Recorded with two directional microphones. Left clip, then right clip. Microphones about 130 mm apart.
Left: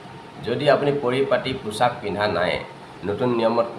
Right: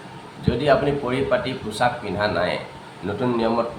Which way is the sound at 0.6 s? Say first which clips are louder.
Left 1 dB; 30° left (ahead or behind).